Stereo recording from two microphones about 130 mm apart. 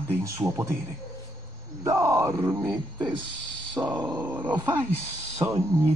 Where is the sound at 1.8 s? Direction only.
25° right (ahead or behind).